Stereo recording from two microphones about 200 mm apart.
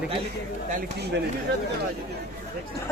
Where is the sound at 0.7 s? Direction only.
55° right (ahead or behind).